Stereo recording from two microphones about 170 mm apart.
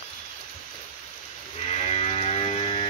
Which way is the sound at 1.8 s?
35° left (ahead or behind).